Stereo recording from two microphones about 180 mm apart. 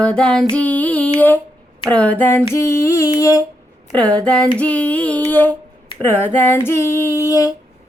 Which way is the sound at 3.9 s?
5° left (ahead or behind).